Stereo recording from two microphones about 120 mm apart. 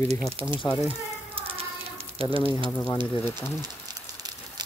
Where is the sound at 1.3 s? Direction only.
50° right (ahead or behind).